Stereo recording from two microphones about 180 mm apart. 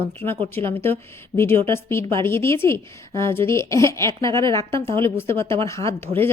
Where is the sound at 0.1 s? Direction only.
10° left (ahead or behind).